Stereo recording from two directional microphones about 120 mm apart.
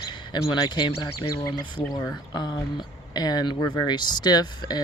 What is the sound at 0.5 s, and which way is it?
Speech, 40° left (ahead or behind).